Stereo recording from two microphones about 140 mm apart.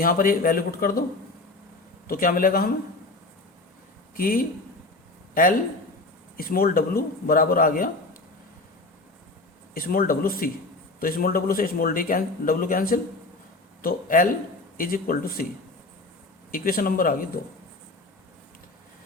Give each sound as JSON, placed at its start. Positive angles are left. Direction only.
{"t": 0.0, "sound": "speech", "side_deg": 90}
{"t": 2.0, "sound": "speech", "side_deg": 90}
{"t": 4.1, "sound": "speech", "side_deg": 90}
{"t": 5.3, "sound": "speech", "side_deg": 80}
{"t": 6.3, "sound": "speech", "side_deg": 90}
{"t": 9.7, "sound": "speech", "side_deg": 90}
{"t": 13.8, "sound": "speech", "side_deg": 75}
{"t": 14.8, "sound": "speech", "side_deg": 90}
{"t": 16.5, "sound": "speech", "side_deg": 90}